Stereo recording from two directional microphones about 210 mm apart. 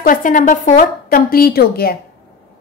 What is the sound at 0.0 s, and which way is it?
A woman's voice, 40° left (ahead or behind).